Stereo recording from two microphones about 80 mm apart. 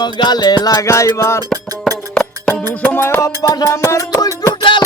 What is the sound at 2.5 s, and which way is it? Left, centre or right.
Music, left.